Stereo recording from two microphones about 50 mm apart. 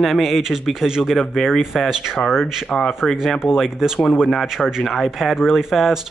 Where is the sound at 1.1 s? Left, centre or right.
Centre.